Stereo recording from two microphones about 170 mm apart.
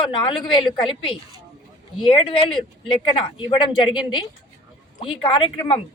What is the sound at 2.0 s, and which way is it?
Speech, 30° left (ahead or behind).